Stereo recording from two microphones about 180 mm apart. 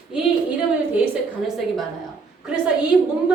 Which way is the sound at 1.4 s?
Centre (ahead or behind).